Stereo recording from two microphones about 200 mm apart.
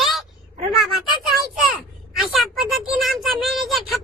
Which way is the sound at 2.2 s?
Centre (ahead or behind).